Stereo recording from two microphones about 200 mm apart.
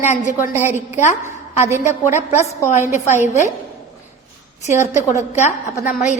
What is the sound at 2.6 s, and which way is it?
Speech, 35° left (ahead or behind).